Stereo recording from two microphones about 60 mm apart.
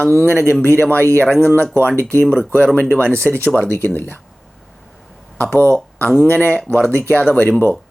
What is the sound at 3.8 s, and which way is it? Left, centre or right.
Speech, left.